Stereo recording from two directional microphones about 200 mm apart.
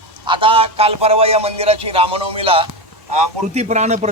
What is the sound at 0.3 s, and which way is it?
A man's voice, 25° right (ahead or behind).